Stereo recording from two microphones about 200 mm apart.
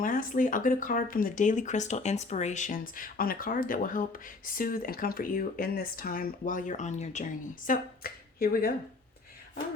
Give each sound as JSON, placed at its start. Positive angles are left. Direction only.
{"t": 0.0, "sound": "speech", "side_deg": 45}
{"t": 7.7, "sound": "speech", "side_deg": 50}